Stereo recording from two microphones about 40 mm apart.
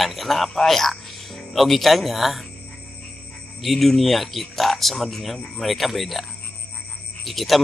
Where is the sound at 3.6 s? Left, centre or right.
Centre.